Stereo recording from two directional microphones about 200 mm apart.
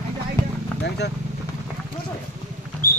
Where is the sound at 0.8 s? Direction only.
55° left (ahead or behind).